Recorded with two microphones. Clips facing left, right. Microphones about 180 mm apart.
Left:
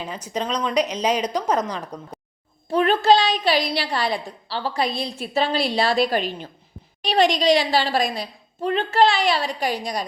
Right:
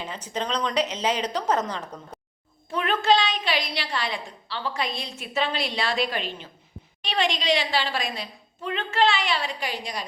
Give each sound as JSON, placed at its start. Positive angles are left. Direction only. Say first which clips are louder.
{"t": 0.0, "sound": "a woman's voice", "louder": "left 3 dB", "side_deg": 10}
{"t": 2.6, "sound": "a woman's voice", "louder": "left 6 dB", "side_deg": 35}